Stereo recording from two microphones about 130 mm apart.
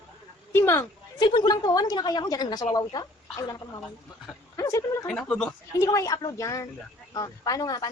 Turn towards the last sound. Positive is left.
turn(degrees=25)  # may be behind; listen again after turning